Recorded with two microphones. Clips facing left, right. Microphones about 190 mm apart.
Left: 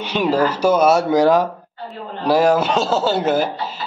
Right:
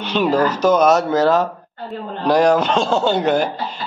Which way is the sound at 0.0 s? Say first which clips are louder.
Right 1 dB; 10° left (ahead or behind).